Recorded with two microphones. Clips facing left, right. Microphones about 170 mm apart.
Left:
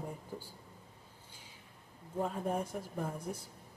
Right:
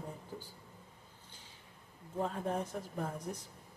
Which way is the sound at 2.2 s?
10° left (ahead or behind).